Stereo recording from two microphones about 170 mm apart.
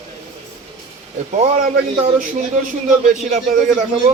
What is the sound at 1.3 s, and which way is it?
Speech, 50° right (ahead or behind).